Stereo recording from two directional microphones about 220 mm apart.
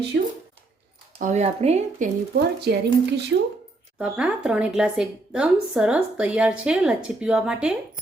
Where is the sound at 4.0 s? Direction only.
5° right (ahead or behind).